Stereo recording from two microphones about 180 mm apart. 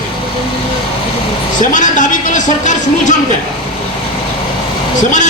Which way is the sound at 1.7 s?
45° left (ahead or behind).